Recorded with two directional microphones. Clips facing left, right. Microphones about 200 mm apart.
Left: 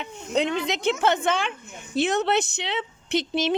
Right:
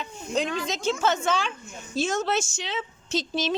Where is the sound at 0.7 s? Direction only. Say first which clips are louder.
Left 2 dB; 60° left (ahead or behind).